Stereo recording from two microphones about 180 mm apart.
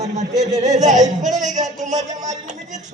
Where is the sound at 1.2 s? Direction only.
40° right (ahead or behind).